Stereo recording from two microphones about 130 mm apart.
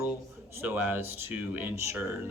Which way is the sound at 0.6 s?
15° right (ahead or behind).